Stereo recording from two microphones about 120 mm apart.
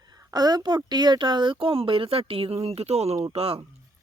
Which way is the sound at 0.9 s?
35° right (ahead or behind).